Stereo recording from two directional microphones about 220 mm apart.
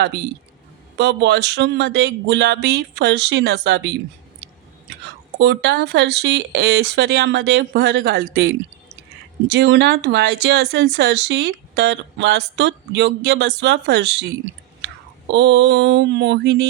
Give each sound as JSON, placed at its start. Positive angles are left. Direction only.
{"t": 0.9, "sound": "speech", "side_deg": -50}
{"t": 5.4, "sound": "speech", "side_deg": -50}
{"t": 15.3, "sound": "speech", "side_deg": -55}